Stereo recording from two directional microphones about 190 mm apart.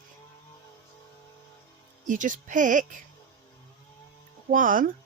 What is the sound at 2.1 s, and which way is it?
Speech, 45° right (ahead or behind).